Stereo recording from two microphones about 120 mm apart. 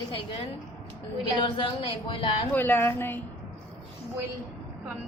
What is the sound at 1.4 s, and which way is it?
Speech, 45° left (ahead or behind).